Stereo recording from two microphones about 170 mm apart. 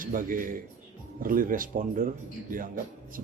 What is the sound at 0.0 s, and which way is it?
A man's voice, 55° right (ahead or behind).